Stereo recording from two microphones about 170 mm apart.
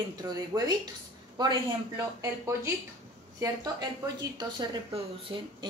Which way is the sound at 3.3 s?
20° right (ahead or behind).